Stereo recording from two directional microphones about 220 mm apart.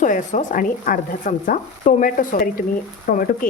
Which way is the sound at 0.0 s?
35° left (ahead or behind).